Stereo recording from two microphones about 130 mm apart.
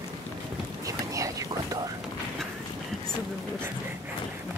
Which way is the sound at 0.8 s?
25° right (ahead or behind).